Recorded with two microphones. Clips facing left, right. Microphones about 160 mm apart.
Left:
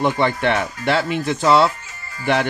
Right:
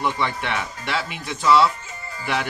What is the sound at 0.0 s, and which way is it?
Speech, 40° left (ahead or behind).